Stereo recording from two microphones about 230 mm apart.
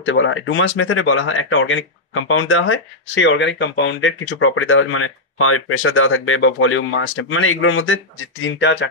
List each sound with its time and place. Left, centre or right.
0.0 s speech: left